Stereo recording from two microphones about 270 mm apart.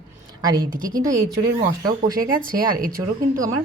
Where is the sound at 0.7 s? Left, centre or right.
Right.